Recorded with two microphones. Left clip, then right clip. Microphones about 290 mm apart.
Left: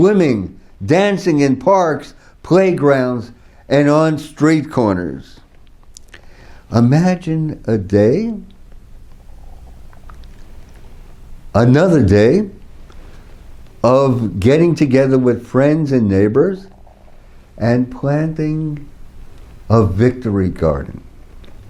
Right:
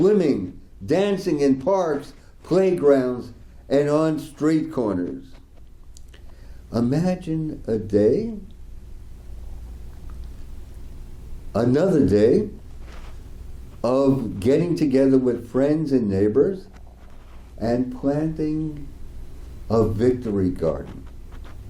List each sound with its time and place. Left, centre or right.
0.0 s a man's voice: left
5.9 s a sound: left
6.7 s a man's voice: left
11.5 s a man's voice: left
13.8 s a man's voice: left
19.6 s a man's voice: left